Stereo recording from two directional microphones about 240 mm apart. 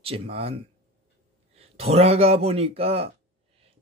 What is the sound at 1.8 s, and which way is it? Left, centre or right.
Speech, right.